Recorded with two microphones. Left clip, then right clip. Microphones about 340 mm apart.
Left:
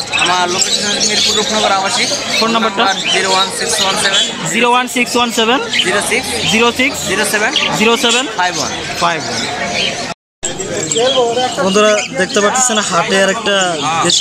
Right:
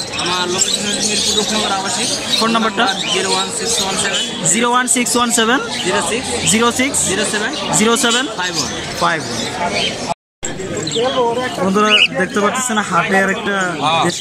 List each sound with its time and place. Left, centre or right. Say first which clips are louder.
2.4 s speech: left 3 dB; centre
4.6 s speech: left 4 dB; centre
11.7 s speech: right 2 dB; centre